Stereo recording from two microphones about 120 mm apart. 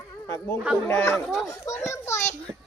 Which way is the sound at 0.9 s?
20° left (ahead or behind).